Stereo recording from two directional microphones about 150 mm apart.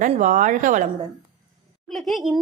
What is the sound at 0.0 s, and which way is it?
Speech, 60° right (ahead or behind).